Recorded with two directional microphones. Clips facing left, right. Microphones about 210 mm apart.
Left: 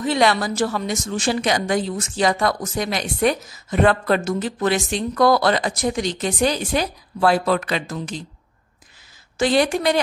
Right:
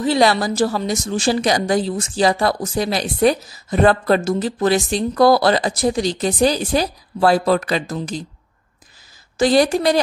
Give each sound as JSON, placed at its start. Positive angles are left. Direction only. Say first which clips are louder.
{"t": 0.0, "sound": "a woman's voice", "louder": "right 3 dB", "side_deg": -35}
{"t": 9.4, "sound": "a woman's voice", "louder": "right 3 dB", "side_deg": -35}